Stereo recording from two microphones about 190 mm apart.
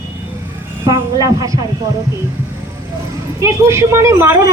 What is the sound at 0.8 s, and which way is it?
Speech, 20° right (ahead or behind).